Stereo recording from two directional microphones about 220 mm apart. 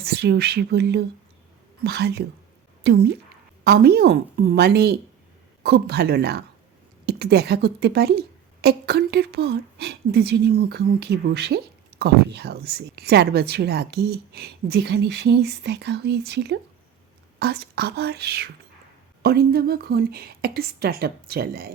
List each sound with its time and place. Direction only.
0.0 s a woman's voice: 45° right (ahead or behind)